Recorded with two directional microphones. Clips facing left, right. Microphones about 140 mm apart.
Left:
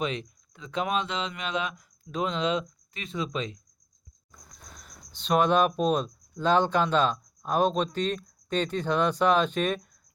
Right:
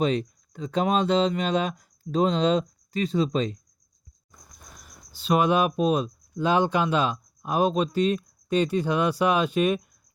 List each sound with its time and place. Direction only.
0.0 s speech: 40° right (ahead or behind)
4.3 s speech: 5° right (ahead or behind)